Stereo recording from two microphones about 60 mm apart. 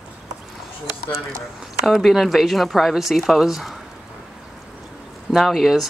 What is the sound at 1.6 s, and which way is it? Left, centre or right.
Speech, centre.